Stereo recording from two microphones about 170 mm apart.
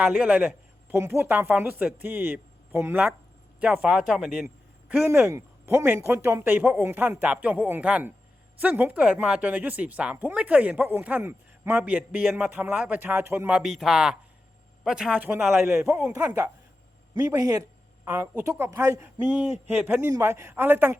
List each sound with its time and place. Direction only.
0.0 s speech: 10° right (ahead or behind)
4.9 s speech: 10° right (ahead or behind)